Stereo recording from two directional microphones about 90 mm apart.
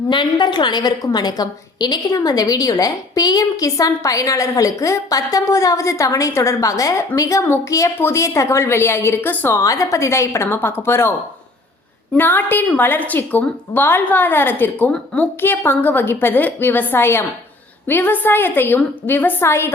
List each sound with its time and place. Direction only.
0.1 s a woman's voice: 60° left (ahead or behind); by 9.6 s 25° left (ahead or behind)
9.6 s a woman's voice: 35° left (ahead or behind)
12.1 s a woman's voice: 20° left (ahead or behind)